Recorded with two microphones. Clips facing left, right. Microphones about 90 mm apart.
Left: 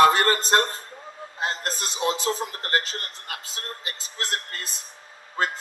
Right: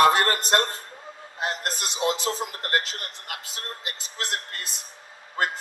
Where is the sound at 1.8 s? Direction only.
20° right (ahead or behind).